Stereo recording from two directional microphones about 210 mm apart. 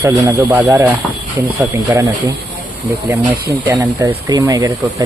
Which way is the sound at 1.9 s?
15° right (ahead or behind).